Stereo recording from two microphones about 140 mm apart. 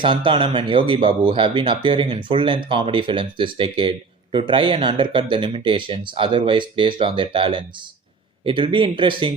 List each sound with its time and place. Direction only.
0.0 s speech: 35° right (ahead or behind)